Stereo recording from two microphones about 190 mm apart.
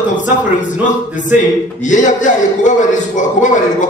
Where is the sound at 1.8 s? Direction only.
40° left (ahead or behind).